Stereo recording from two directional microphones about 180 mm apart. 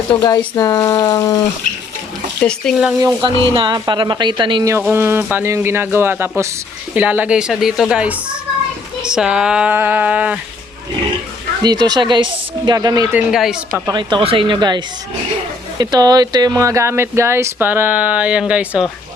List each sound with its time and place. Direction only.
0.2 s speech: 20° left (ahead or behind)
2.4 s a woman's voice: 5° left (ahead or behind)
3.2 s speech: 25° right (ahead or behind)
4.9 s a woman's voice: 10° right (ahead or behind)
11.6 s speech: 20° right (ahead or behind)
13.1 s a woman's voice: 5° right (ahead or behind)
13.8 s speech: 25° right (ahead or behind)
15.8 s speech: 20° right (ahead or behind); by 18.9 s 5° right (ahead or behind)